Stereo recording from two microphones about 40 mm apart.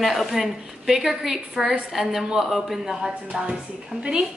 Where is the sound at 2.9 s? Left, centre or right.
Centre.